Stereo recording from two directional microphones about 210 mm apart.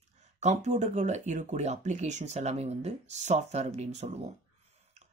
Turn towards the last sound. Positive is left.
turn(degrees=-30)  # may be behind; listen again after turning